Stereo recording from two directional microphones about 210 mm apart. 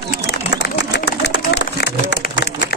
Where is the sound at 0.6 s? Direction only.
55° left (ahead or behind).